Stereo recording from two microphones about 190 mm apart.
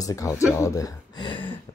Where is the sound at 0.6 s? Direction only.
15° left (ahead or behind).